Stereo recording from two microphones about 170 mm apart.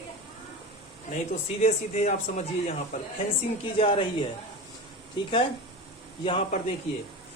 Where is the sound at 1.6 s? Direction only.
40° left (ahead or behind).